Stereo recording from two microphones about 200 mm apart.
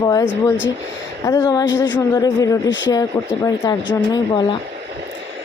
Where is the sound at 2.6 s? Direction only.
65° left (ahead or behind).